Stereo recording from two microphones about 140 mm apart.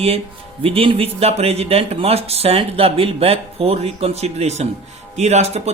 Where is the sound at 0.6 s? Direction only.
40° right (ahead or behind).